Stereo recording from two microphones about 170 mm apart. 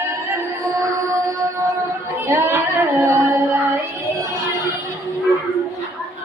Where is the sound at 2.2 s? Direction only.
15° right (ahead or behind).